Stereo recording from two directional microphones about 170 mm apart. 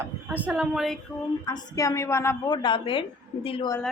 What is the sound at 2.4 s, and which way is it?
A woman's voice, 25° left (ahead or behind).